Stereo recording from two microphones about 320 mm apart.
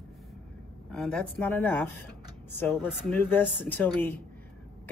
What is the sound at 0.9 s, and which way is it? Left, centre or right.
Speech, centre.